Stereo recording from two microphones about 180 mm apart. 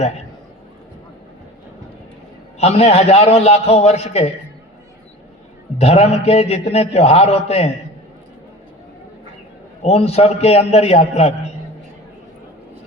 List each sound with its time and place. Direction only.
2.6 s a man's voice: 40° left (ahead or behind)
5.7 s a man's voice: 35° left (ahead or behind)
9.8 s a man's voice: 35° left (ahead or behind)